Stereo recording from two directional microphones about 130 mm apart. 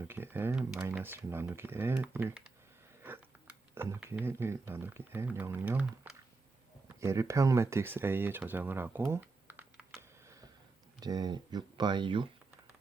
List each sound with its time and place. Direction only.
0.0 s speech: 15° right (ahead or behind)
6.0 s a sound: 15° right (ahead or behind)
6.8 s speech: 20° right (ahead or behind)
11.0 s speech: 30° right (ahead or behind)